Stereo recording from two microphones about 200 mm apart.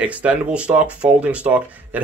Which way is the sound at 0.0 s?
5° right (ahead or behind).